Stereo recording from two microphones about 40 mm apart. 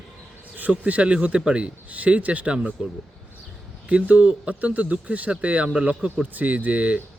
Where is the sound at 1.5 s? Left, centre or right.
Right.